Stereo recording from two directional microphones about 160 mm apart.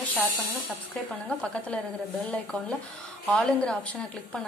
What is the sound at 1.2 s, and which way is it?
Speech, 5° left (ahead or behind).